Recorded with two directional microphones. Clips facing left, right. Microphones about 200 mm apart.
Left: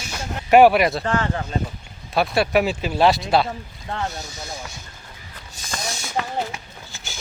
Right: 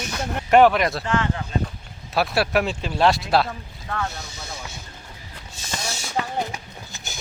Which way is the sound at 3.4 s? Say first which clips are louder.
Left 2 dB; 25° left (ahead or behind).